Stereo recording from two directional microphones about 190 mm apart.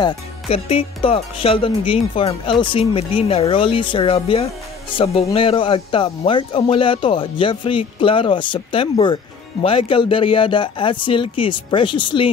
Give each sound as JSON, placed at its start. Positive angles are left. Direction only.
{"t": 0.0, "sound": "speech", "side_deg": 30}